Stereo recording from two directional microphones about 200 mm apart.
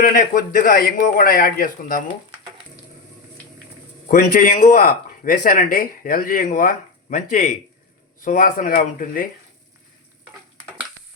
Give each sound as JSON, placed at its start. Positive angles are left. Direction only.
{"t": 0.0, "sound": "speech", "side_deg": 45}
{"t": 4.1, "sound": "speech", "side_deg": 45}